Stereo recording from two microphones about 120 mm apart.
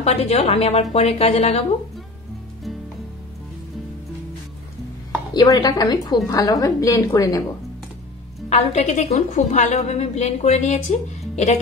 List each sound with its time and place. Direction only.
0.0 s a woman's voice: 60° left (ahead or behind)
5.3 s a woman's voice: 35° left (ahead or behind)
8.5 s a woman's voice: 65° left (ahead or behind)